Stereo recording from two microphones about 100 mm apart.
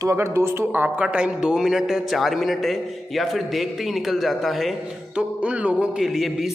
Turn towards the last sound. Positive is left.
turn(degrees=-5)  # may be behind; listen again after turning